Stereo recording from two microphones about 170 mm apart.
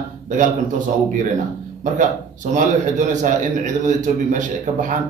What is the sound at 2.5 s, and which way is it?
A man's voice, 45° right (ahead or behind).